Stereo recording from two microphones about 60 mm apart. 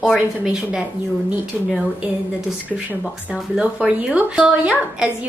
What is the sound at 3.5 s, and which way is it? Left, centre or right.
Speech, centre.